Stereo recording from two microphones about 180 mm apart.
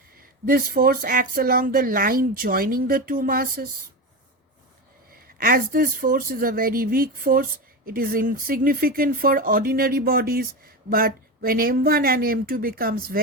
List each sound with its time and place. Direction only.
0.2 s speech: 55° right (ahead or behind)
5.1 s speech: 55° right (ahead or behind)